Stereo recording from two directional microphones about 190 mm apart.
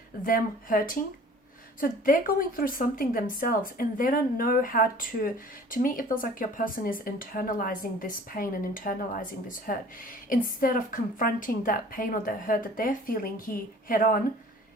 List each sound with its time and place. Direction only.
0.3 s speech: 50° left (ahead or behind)